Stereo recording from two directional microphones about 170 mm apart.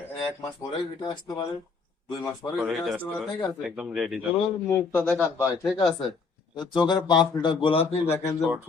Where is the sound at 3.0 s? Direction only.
10° left (ahead or behind).